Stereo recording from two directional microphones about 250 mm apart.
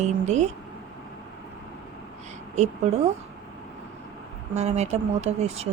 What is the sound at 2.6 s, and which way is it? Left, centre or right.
Speech, right.